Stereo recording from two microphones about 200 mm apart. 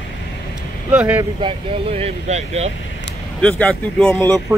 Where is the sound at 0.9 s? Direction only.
5° right (ahead or behind).